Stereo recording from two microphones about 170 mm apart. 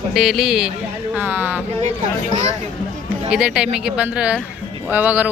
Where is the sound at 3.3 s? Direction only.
5° right (ahead or behind).